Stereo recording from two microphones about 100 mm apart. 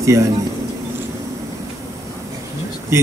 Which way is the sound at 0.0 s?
30° right (ahead or behind).